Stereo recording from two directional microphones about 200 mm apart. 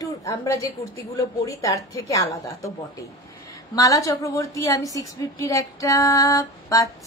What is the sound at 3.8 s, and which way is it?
A woman's voice, 15° left (ahead or behind).